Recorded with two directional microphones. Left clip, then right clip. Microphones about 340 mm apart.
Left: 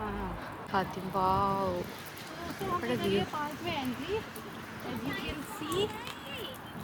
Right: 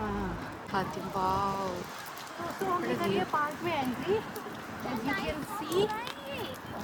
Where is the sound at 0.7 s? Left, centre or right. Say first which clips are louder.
Left 1 dB; centre.